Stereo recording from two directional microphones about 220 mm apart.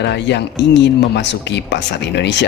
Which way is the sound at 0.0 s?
50° left (ahead or behind).